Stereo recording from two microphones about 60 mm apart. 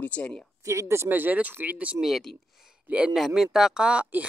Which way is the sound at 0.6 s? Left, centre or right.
Right.